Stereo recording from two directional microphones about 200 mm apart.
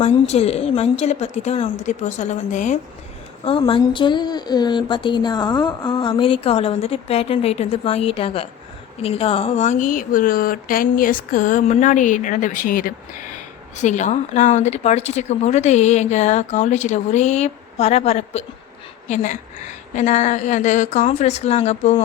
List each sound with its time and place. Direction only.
0.0 s speech: 30° left (ahead or behind)
3.4 s a woman's voice: 25° left (ahead or behind)